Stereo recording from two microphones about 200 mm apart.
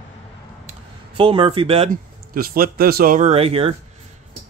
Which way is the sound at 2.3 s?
45° right (ahead or behind).